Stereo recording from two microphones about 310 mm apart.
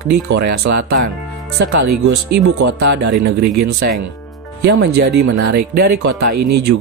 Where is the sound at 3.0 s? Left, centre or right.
Right.